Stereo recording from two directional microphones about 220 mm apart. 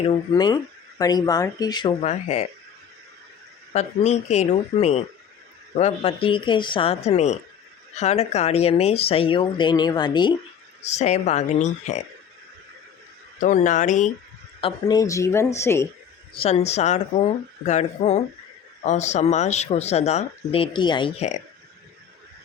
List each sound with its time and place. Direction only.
0.0 s speech: 20° left (ahead or behind)
3.7 s speech: 30° left (ahead or behind)
10.8 s speech: 30° left (ahead or behind)
13.4 s speech: 35° left (ahead or behind)
14.6 s a woman's voice: 20° left (ahead or behind)
16.3 s speech: 25° left (ahead or behind)